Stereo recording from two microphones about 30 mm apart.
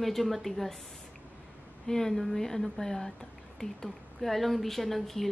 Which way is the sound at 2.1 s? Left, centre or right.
Centre.